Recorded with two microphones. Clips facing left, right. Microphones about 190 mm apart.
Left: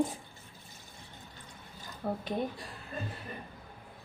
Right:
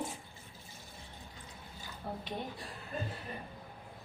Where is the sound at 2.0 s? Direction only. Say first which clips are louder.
Left 7 dB; 55° left (ahead or behind).